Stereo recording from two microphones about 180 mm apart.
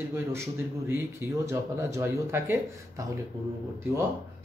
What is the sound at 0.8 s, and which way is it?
Speech, 15° right (ahead or behind).